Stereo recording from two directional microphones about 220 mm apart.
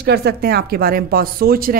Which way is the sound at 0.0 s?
50° right (ahead or behind).